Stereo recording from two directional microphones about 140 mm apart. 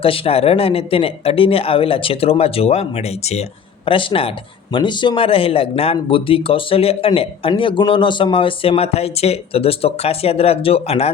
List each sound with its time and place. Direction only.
0.0 s speech: 40° left (ahead or behind)
3.8 s speech: 40° left (ahead or behind)